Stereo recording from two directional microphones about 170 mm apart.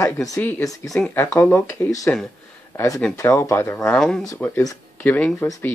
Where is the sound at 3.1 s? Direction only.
20° left (ahead or behind).